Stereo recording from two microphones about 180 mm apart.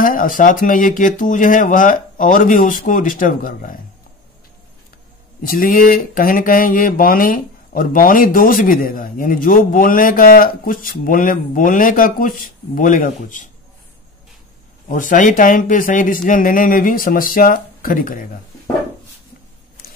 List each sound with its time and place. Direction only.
0.0 s speech: 50° left (ahead or behind)
5.5 s speech: 50° left (ahead or behind)
14.9 s speech: 45° left (ahead or behind)